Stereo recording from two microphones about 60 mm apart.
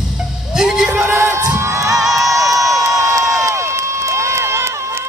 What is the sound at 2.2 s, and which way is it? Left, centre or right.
Crowd, right.